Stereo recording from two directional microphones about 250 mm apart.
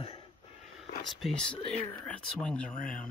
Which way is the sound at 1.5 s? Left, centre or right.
Left.